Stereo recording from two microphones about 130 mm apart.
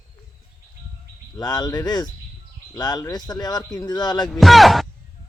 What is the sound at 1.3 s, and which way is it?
Speech, 30° left (ahead or behind).